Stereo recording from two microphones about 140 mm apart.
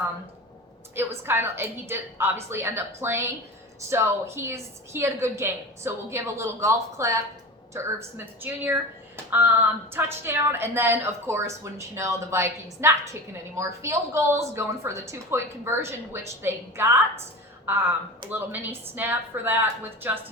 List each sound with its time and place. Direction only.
0.9 s a woman's voice: 15° right (ahead or behind)
9.9 s a woman's voice: 15° right (ahead or behind)